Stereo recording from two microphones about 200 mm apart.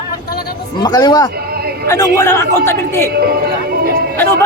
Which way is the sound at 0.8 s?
20° left (ahead or behind).